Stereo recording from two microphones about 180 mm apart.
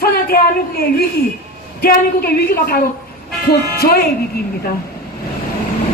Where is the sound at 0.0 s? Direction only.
60° left (ahead or behind).